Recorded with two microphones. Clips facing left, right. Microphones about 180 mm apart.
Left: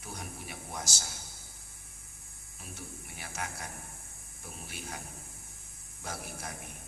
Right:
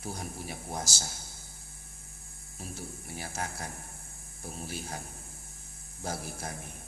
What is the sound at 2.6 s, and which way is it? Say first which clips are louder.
Speech: right 4 dB; 35° right (ahead or behind).